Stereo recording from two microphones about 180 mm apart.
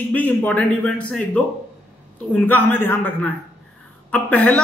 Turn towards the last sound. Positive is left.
turn(degrees=10)  # may be behind; listen again after turning